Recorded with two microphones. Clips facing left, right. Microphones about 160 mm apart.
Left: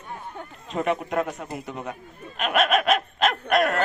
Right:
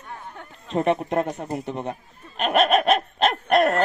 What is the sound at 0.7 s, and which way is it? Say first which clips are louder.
Speech: right 3 dB; 30° right (ahead or behind).